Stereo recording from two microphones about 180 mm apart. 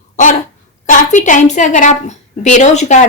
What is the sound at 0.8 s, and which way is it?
A woman's voice, 45° left (ahead or behind).